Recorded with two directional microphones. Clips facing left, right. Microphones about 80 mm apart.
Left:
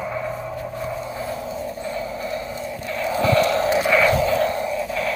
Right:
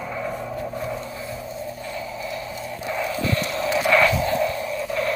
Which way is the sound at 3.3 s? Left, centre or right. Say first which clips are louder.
Left 8 dB; left.